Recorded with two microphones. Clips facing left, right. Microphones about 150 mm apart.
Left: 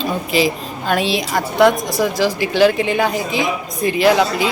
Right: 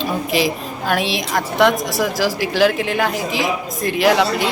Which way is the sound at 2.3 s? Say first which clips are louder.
Left 1 dB; 90° right.